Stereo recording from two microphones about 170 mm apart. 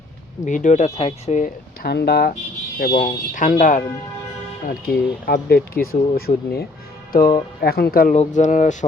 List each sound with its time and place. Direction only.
0.4 s speech: 45° left (ahead or behind)
1.8 s speech: 70° left (ahead or behind)
8.1 s speech: 45° left (ahead or behind)